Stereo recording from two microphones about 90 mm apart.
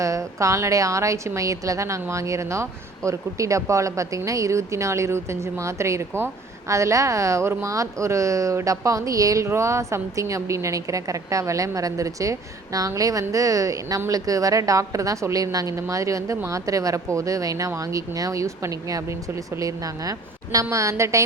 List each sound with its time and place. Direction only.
0.0 s a woman's voice: 35° right (ahead or behind)